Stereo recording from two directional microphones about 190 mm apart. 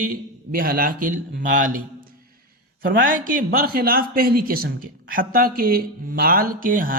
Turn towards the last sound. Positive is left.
turn(degrees=-45)  # may be behind; listen again after turning